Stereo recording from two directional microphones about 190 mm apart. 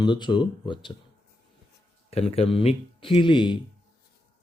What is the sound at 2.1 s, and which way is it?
Speech, 30° left (ahead or behind).